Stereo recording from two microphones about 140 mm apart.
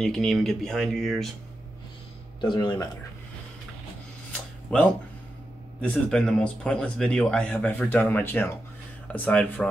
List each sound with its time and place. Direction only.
0.0 s speech: 5° left (ahead or behind)
2.4 s speech: 35° left (ahead or behind)
4.3 s a sound: 5° left (ahead or behind)
5.8 s speech: 5° left (ahead or behind)